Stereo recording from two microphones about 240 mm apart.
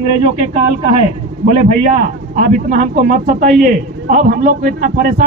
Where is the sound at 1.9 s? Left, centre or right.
Right.